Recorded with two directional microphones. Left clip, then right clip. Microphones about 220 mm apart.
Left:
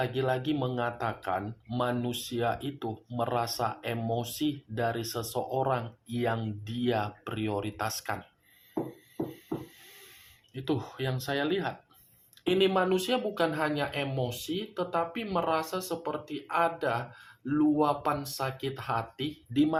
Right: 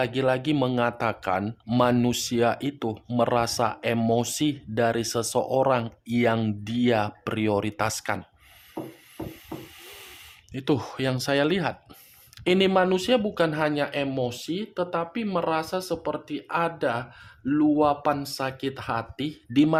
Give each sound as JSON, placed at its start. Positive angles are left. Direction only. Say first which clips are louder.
{"t": 0.0, "sound": "speech", "louder": "right 6 dB", "side_deg": -45}
{"t": 10.5, "sound": "speech", "louder": "right 7 dB", "side_deg": -45}